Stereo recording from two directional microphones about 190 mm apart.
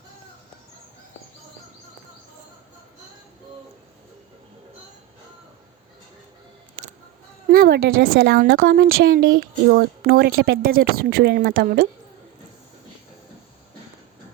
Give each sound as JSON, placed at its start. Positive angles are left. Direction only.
{"t": 7.4, "sound": "speech", "side_deg": -50}